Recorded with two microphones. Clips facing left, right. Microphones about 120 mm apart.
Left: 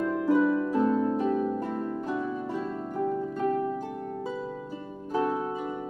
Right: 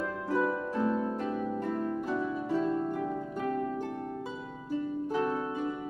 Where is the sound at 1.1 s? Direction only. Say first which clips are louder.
Left 6 dB; 15° left (ahead or behind).